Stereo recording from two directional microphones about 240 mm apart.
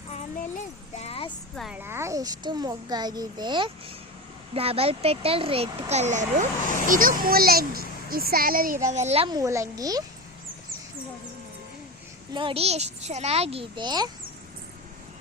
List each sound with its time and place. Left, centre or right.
0.1 s a sound: left
1.5 s a child's voice: centre
12.3 s a child's voice: right